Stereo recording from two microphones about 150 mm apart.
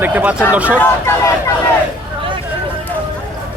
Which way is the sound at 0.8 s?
15° left (ahead or behind).